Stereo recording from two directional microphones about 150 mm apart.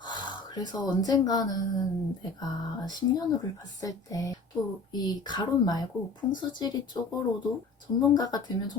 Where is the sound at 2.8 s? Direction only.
25° left (ahead or behind).